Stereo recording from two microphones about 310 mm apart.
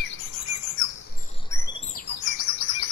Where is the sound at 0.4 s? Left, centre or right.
Left.